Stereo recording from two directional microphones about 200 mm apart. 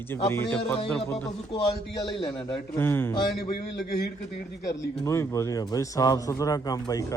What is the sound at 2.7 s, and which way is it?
Speech, 10° left (ahead or behind).